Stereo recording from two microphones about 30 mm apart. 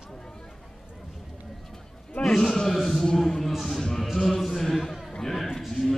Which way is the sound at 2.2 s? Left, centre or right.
Centre.